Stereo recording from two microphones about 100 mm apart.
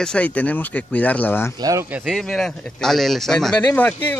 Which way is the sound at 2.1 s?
5° left (ahead or behind).